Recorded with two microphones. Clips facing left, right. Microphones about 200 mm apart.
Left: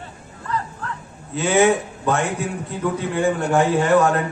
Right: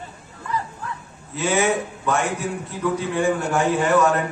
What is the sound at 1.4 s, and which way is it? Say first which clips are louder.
Speech: left 4 dB; 60° left (ahead or behind).